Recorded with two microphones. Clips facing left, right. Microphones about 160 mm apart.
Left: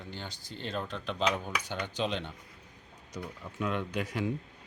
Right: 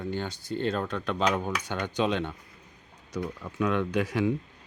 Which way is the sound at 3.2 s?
85° right.